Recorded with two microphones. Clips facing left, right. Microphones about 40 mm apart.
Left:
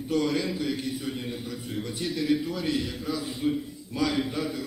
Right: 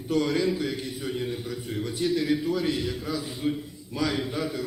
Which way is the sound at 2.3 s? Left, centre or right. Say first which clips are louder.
Right 1 dB; centre.